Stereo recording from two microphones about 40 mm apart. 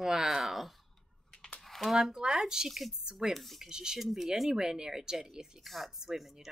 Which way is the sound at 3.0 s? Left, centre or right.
Centre.